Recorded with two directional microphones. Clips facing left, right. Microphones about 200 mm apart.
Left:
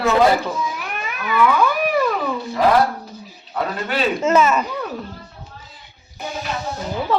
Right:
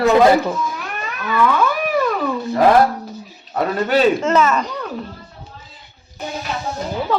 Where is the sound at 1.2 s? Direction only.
5° left (ahead or behind).